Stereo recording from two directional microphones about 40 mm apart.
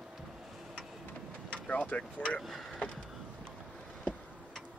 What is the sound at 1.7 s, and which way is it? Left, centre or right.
Speech, left.